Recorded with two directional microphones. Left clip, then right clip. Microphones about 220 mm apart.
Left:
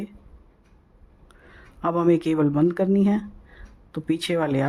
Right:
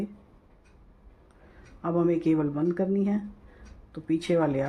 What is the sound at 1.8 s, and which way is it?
Speech, 50° left (ahead or behind).